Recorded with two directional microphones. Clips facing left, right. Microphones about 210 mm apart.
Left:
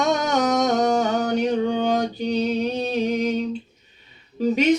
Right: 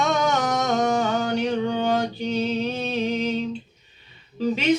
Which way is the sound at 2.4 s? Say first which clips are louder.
Left 2 dB; 15° left (ahead or behind).